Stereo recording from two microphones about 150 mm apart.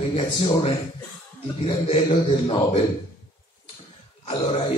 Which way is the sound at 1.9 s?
35° left (ahead or behind).